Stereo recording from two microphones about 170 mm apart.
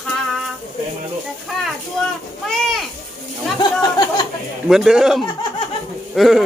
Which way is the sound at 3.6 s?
25° left (ahead or behind).